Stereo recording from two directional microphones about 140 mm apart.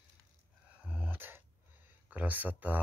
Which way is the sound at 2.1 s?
10° right (ahead or behind).